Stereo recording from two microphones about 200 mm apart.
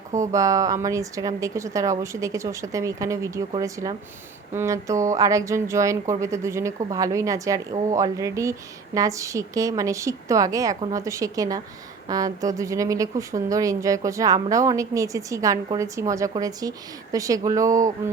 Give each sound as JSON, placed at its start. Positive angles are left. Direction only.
{"t": 0.3, "sound": "speech", "side_deg": -15}